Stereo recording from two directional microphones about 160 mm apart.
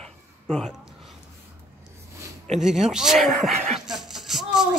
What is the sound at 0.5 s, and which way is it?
Speech, centre (ahead or behind).